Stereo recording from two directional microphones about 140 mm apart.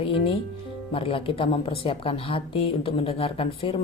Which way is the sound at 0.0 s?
40° left (ahead or behind).